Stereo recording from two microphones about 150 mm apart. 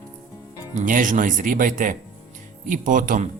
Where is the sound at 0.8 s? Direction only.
60° right (ahead or behind).